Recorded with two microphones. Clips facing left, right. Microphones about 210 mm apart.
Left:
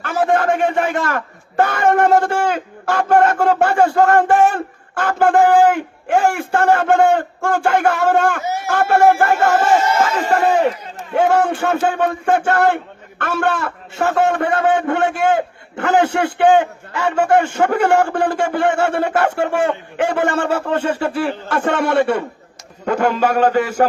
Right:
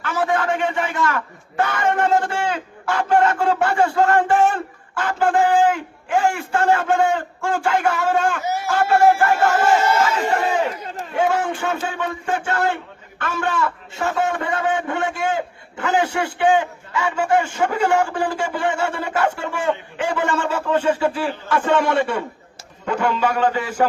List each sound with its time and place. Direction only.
0.0 s a sound: 45° left (ahead or behind)
0.4 s a man's voice: 45° left (ahead or behind)
11.1 s a man's voice: 60° left (ahead or behind)
22.9 s a man's voice: 45° left (ahead or behind)